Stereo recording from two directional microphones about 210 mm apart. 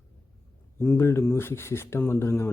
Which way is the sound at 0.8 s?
10° left (ahead or behind).